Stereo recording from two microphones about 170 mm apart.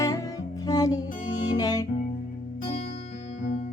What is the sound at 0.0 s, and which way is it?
Music, 20° left (ahead or behind).